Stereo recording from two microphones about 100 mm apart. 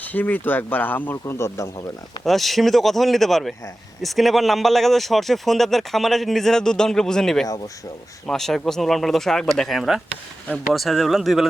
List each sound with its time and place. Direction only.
0.0 s a man's voice: 15° left (ahead or behind)
2.2 s speech: centre (ahead or behind)